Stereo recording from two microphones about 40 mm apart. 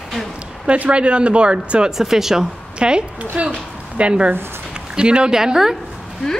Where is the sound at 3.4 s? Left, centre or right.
Right.